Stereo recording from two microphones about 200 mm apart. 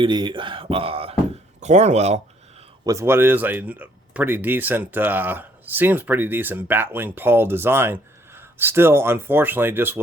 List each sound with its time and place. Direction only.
0.0 s speech: 25° right (ahead or behind)
2.8 s speech: 15° right (ahead or behind)